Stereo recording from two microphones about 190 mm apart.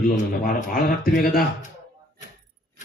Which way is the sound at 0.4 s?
50° left (ahead or behind).